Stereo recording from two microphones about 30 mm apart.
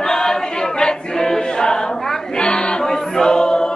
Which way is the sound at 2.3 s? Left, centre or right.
Left.